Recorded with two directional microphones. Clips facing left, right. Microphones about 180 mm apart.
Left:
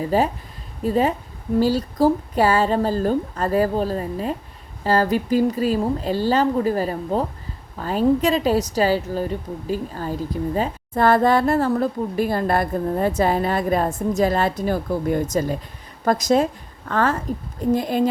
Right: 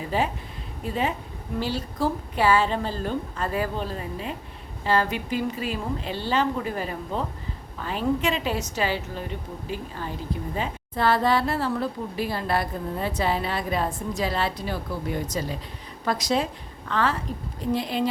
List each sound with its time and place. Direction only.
0.0 s a woman's voice: 40° left (ahead or behind)